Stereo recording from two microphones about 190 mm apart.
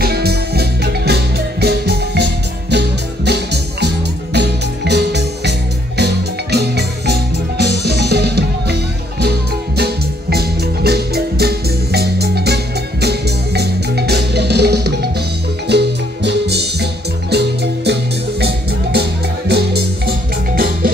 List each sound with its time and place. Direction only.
0.0 s music: 55° right (ahead or behind)
9.8 s music: 55° right (ahead or behind)